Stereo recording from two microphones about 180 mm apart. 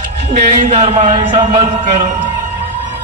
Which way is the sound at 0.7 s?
40° right (ahead or behind).